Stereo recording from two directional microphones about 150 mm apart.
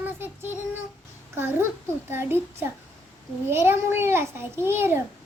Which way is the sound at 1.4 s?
15° right (ahead or behind).